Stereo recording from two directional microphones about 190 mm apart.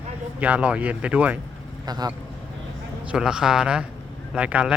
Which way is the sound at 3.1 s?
5° right (ahead or behind).